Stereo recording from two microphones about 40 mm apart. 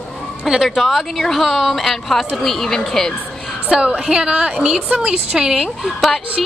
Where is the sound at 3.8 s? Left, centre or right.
Right.